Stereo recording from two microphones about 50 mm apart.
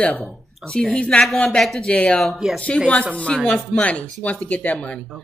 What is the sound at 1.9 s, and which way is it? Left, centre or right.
Speech, left.